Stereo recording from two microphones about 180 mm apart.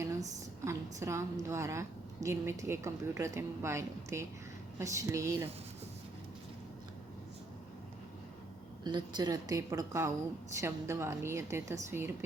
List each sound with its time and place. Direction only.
0.0 s a woman's voice: 15° right (ahead or behind)
8.8 s a woman's voice: 25° right (ahead or behind)